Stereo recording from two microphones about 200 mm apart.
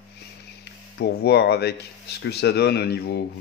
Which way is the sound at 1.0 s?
55° left (ahead or behind).